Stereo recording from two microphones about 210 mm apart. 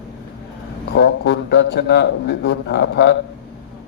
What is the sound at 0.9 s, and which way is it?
A man's voice, 55° left (ahead or behind).